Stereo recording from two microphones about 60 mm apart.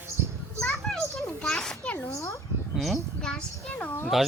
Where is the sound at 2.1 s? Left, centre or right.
Left.